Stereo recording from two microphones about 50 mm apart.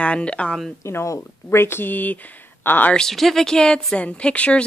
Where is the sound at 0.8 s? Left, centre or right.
Left.